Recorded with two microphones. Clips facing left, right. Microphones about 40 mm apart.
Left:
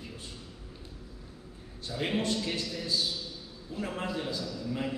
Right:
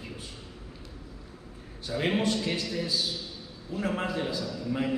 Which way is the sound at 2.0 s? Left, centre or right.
Right.